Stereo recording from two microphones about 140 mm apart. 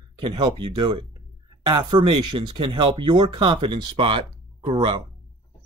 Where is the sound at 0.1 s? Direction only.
35° right (ahead or behind).